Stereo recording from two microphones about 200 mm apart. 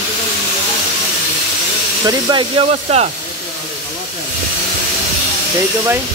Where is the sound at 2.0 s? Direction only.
25° right (ahead or behind).